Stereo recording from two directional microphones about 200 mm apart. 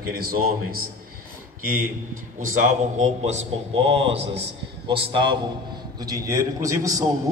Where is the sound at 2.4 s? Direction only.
40° right (ahead or behind).